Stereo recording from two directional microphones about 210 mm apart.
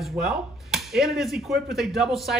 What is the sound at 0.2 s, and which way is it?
Speech, centre (ahead or behind).